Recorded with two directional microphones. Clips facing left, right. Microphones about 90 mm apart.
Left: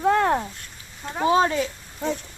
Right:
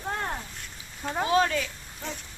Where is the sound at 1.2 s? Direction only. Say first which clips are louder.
Left 5 dB; 25° left (ahead or behind).